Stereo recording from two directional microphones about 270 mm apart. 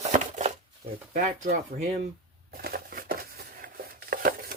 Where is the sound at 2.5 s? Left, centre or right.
Right.